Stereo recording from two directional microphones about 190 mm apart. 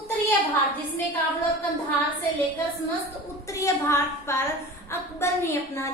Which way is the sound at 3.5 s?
15° left (ahead or behind).